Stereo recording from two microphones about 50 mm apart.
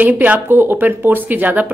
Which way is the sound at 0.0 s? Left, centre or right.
Right.